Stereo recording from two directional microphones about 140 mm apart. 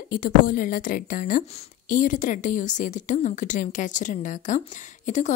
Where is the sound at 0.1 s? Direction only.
80° left.